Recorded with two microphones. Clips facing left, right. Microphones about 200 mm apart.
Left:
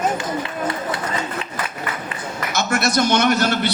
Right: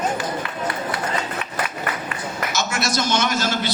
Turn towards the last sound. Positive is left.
turn(degrees=60)  # may be behind; listen again after turning